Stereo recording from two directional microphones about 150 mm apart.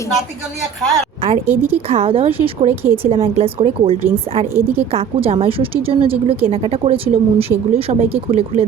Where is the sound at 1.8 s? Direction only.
40° right (ahead or behind).